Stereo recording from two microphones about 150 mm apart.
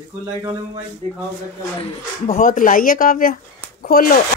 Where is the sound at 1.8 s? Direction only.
40° left (ahead or behind).